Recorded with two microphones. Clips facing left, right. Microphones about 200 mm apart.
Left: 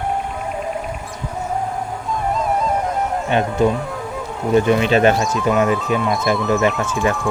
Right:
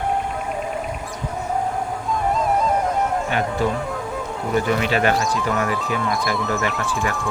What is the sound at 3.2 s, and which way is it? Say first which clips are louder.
Speech: left 5 dB; 20° left (ahead or behind).